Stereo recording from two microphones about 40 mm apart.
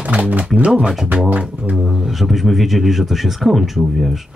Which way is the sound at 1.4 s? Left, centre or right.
Right.